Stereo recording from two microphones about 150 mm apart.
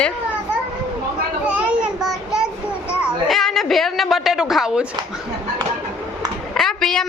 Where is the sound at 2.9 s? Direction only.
Centre (ahead or behind).